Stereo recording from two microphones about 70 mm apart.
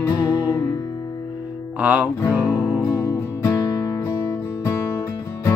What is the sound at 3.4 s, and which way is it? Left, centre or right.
Music, left.